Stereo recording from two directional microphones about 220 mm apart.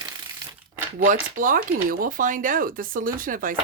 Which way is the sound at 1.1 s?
35° right (ahead or behind).